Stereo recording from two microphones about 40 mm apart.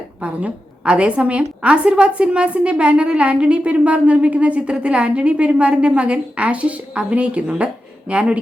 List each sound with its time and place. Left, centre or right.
0.2 s a woman's voice: right